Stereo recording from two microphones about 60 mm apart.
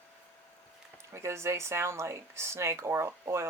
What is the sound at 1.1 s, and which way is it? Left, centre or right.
Speech, right.